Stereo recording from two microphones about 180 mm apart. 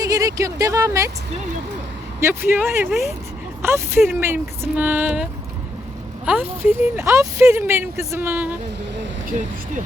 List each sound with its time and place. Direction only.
0.0 s speech: 20° right (ahead or behind)
2.2 s speech: 10° right (ahead or behind)